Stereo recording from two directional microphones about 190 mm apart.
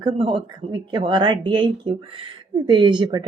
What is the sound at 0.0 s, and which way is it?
Speech, 25° right (ahead or behind).